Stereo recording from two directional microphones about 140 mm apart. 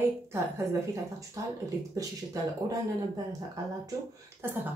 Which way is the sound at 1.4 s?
20° right (ahead or behind).